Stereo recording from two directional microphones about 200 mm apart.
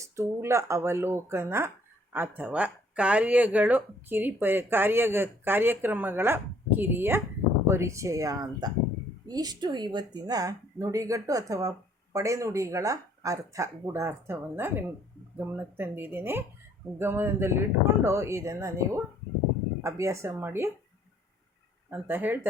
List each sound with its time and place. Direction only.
0.0 s speech: 15° right (ahead or behind)
21.8 s speech: 10° right (ahead or behind)